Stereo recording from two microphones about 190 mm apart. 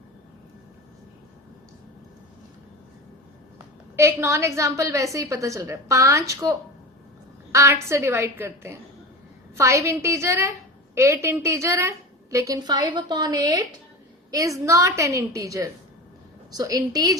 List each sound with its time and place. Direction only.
3.9 s a woman's voice: 15° right (ahead or behind)